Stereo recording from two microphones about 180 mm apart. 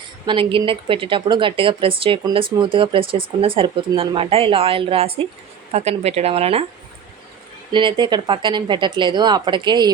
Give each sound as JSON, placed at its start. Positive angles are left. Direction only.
{"t": 0.3, "sound": "speech", "side_deg": -30}
{"t": 7.7, "sound": "speech", "side_deg": -25}